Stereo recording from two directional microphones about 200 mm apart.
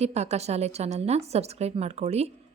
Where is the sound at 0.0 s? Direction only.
35° right (ahead or behind).